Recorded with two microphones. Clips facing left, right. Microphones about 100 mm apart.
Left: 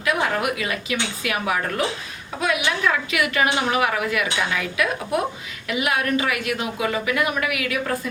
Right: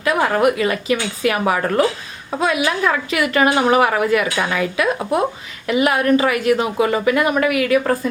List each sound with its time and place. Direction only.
0.0 s a woman's voice: 40° right (ahead or behind)